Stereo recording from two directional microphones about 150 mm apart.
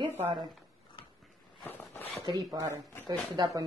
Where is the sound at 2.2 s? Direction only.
25° right (ahead or behind).